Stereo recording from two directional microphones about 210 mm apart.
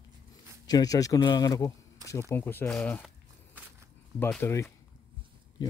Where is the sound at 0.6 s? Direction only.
15° left (ahead or behind).